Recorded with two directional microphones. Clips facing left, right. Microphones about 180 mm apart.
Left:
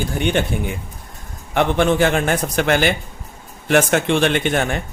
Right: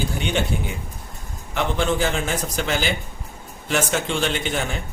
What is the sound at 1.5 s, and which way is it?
Speech, 60° left (ahead or behind).